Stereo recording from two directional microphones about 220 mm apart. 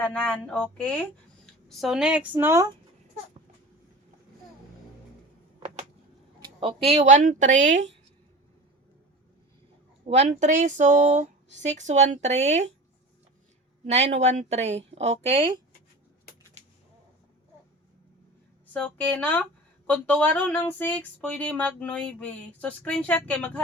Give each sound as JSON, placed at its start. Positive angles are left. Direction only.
{"t": 0.0, "sound": "speech", "side_deg": 5}
{"t": 6.6, "sound": "speech", "side_deg": -25}
{"t": 10.1, "sound": "speech", "side_deg": -30}
{"t": 13.8, "sound": "speech", "side_deg": -30}
{"t": 18.7, "sound": "speech", "side_deg": 5}